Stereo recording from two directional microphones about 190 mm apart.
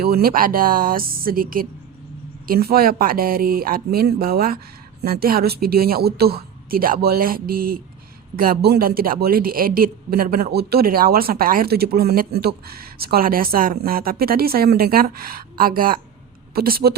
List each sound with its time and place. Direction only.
0.0 s speech: 50° right (ahead or behind)